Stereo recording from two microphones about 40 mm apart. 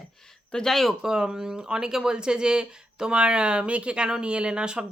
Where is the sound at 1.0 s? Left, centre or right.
Centre.